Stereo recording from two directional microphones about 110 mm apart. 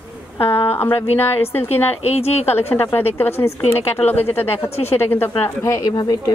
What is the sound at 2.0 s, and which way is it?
Speech, 70° left (ahead or behind).